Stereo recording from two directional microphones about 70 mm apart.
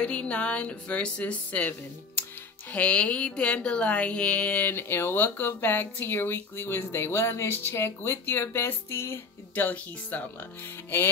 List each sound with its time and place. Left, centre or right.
0.0 s speech: centre